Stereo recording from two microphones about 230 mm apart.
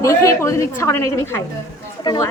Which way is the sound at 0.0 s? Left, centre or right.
Centre.